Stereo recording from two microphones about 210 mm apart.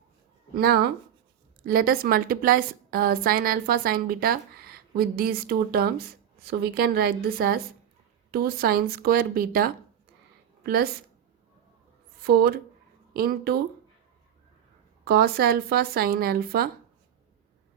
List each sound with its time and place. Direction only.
0.5 s a woman's voice: 45° right (ahead or behind)
12.2 s a woman's voice: 45° right (ahead or behind)
15.0 s a woman's voice: 45° right (ahead or behind)